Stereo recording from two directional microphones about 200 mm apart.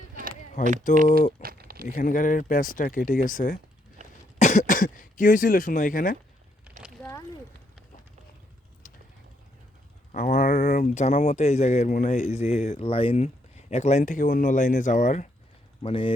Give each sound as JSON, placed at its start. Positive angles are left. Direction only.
{"t": 0.6, "sound": "speech", "side_deg": 45}
{"t": 1.4, "sound": "a sound", "side_deg": -50}
{"t": 1.9, "sound": "speech", "side_deg": 40}
{"t": 4.0, "sound": "cough", "side_deg": -35}
{"t": 4.4, "sound": "speech", "side_deg": 35}
{"t": 6.7, "sound": "a sound", "side_deg": -5}
{"t": 7.0, "sound": "a sound", "side_deg": 15}
{"t": 10.1, "sound": "speech", "side_deg": 45}
{"t": 15.8, "sound": "speech", "side_deg": 25}